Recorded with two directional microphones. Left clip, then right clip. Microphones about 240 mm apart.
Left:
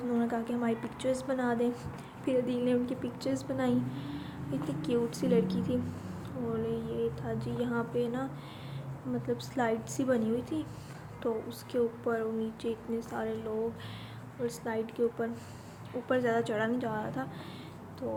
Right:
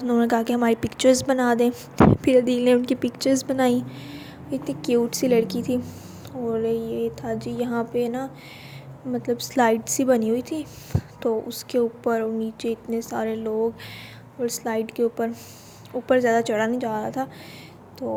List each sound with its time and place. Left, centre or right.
0.1 s a woman's voice: right